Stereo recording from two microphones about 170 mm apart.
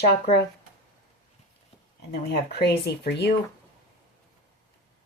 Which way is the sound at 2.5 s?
75° left (ahead or behind).